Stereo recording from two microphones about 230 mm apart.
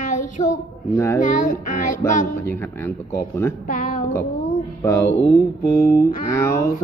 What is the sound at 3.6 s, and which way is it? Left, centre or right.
Speech, left.